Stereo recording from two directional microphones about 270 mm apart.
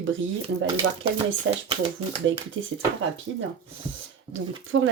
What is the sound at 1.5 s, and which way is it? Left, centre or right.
Speech, right.